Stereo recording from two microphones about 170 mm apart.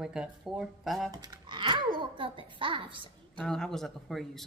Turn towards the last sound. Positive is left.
turn(degrees=0)  # may be behind; listen again after turning